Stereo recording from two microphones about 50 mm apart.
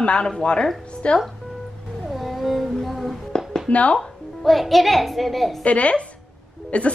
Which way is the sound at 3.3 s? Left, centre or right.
Centre.